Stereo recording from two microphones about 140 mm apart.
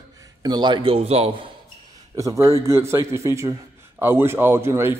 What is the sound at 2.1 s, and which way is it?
Speech, 20° right (ahead or behind).